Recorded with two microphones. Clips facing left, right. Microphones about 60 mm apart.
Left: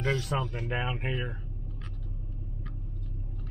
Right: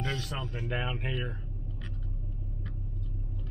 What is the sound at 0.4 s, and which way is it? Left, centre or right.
Speech, centre.